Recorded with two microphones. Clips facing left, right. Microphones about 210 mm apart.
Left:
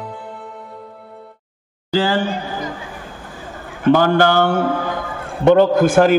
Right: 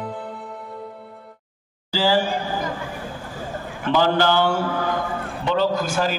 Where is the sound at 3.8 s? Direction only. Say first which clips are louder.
Left 6 dB; 50° left (ahead or behind).